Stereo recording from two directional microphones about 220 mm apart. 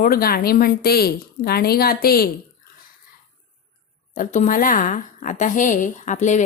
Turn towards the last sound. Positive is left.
turn(degrees=35)  # may be behind; listen again after turning